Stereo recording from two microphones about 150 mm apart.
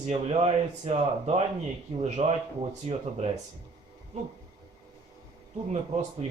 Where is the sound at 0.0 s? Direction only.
45° right (ahead or behind).